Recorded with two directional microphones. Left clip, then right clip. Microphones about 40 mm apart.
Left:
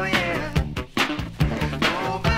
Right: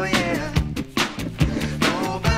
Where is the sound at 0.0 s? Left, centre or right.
Right.